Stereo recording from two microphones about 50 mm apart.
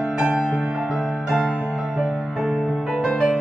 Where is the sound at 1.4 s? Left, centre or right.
Centre.